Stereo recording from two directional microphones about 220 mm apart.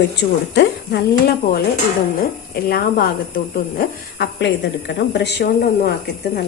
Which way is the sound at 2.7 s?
40° left (ahead or behind).